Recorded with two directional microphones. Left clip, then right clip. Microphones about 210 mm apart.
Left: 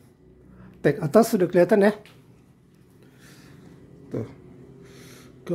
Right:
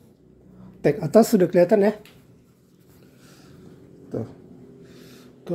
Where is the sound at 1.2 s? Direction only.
Centre (ahead or behind).